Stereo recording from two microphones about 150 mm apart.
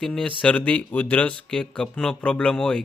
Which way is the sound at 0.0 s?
5° left (ahead or behind).